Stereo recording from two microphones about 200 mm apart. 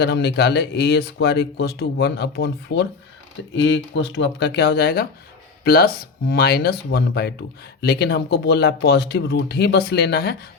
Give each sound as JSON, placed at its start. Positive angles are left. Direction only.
{"t": 0.0, "sound": "speech", "side_deg": 55}